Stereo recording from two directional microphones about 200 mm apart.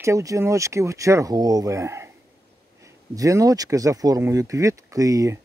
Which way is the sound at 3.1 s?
15° right (ahead or behind).